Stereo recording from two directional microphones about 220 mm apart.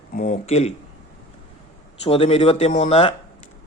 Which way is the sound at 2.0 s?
25° left (ahead or behind).